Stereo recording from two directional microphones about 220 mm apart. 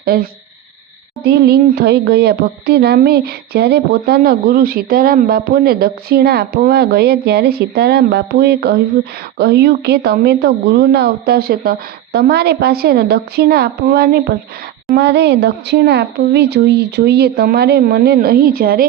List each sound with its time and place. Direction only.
0.0 s speech: 45° right (ahead or behind)